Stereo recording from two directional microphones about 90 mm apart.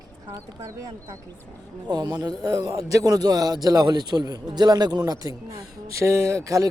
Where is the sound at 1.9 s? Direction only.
50° right (ahead or behind).